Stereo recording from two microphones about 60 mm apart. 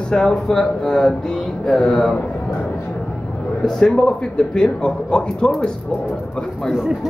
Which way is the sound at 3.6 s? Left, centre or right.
Centre.